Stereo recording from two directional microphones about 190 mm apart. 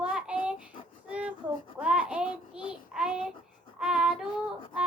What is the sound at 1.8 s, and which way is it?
Child singing, 5° right (ahead or behind).